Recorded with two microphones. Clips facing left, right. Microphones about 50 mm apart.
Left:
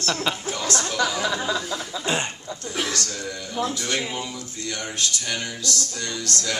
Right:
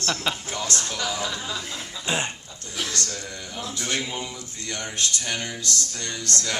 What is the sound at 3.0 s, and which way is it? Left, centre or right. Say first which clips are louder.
Music: left 3 dB; left.